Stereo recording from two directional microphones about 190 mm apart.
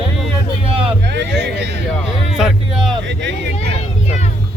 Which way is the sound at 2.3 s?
5° right (ahead or behind).